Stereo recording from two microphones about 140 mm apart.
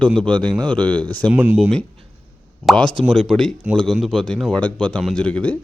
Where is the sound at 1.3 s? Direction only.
15° right (ahead or behind).